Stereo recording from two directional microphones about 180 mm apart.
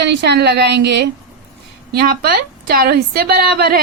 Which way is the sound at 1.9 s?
60° right (ahead or behind).